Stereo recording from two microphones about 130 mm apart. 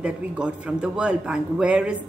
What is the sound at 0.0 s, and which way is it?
A man's voice, 5° right (ahead or behind).